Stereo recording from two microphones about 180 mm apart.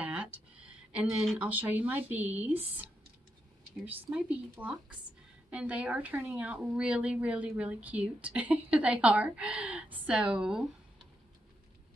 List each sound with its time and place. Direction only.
0.0 s speech: 5° right (ahead or behind)
3.8 s a woman's voice: 10° right (ahead or behind)